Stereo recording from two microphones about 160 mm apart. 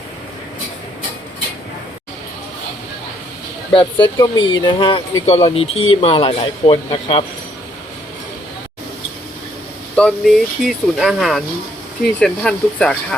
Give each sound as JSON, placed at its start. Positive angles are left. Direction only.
{"t": 3.7, "sound": "speech", "side_deg": 30}
{"t": 9.9, "sound": "speech", "side_deg": 5}